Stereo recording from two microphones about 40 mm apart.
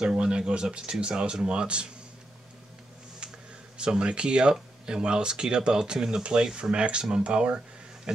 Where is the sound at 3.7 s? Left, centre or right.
Right.